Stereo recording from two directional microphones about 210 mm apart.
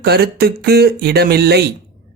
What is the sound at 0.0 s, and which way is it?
Speech, 50° right (ahead or behind).